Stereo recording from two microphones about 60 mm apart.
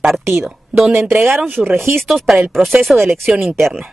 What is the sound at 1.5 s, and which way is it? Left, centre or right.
Speech, right.